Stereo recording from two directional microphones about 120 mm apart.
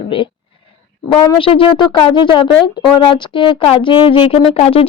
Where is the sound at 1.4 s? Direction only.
50° left (ahead or behind).